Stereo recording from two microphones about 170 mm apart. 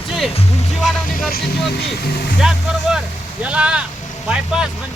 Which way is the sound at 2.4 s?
5° right (ahead or behind).